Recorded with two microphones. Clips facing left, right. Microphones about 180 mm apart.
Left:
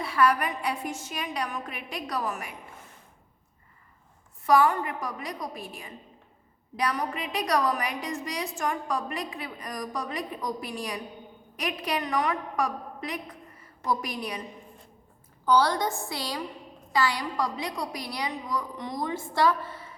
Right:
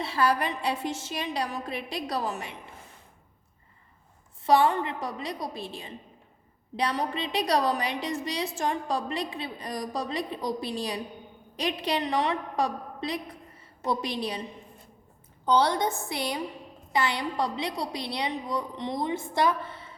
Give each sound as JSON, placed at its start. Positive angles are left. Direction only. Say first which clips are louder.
{"t": 0.0, "sound": "a woman's voice", "louder": "left 1 dB", "side_deg": -30}
{"t": 4.4, "sound": "a woman's voice", "louder": "even", "side_deg": -25}
{"t": 15.4, "sound": "a woman's voice", "louder": "even", "side_deg": -25}